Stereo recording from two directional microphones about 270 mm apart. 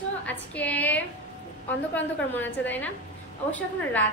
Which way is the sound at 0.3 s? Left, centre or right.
Centre.